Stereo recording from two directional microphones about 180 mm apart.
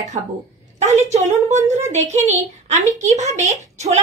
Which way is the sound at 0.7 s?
40° right (ahead or behind).